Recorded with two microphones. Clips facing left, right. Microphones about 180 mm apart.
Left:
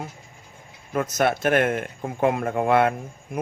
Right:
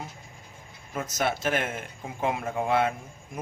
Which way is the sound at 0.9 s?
60° left (ahead or behind).